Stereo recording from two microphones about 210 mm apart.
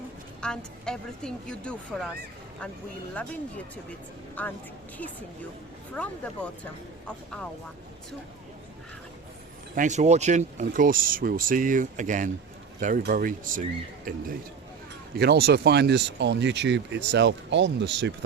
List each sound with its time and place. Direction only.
0.4 s a woman's voice: 5° left (ahead or behind)
4.4 s a woman's voice: 10° left (ahead or behind)
5.9 s a woman's voice: 5° left (ahead or behind)
9.7 s speech: 35° right (ahead or behind); by 18.1 s 55° right (ahead or behind)